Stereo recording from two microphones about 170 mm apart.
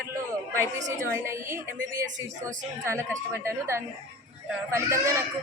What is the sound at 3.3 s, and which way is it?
A woman's voice, 15° right (ahead or behind).